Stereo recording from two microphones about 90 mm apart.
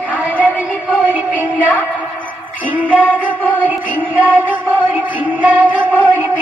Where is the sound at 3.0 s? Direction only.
15° right (ahead or behind).